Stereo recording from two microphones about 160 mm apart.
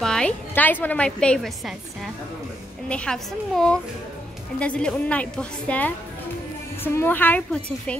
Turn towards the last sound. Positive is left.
turn(degrees=5)  # may be behind; listen again after turning